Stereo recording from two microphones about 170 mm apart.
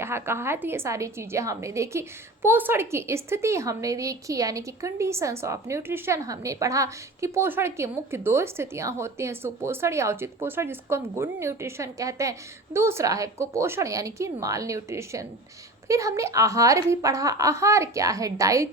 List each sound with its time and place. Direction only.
0.0 s a woman's voice: 15° right (ahead or behind)